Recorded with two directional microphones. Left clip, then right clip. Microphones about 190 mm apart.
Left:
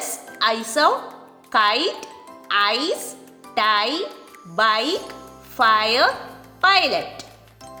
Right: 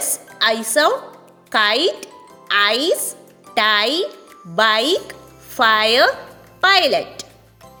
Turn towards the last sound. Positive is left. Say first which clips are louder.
# right 4 dB
turn(degrees=-35)  # may be behind; listen again after turning